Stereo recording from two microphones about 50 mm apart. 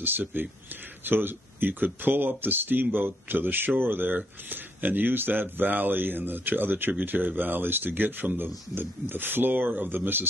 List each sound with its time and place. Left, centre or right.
0.0 s speech: right